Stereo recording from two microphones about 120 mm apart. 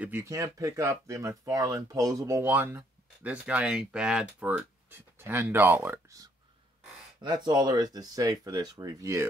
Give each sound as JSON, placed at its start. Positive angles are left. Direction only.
{"t": 0.0, "sound": "speech", "side_deg": -20}
{"t": 7.2, "sound": "speech", "side_deg": -35}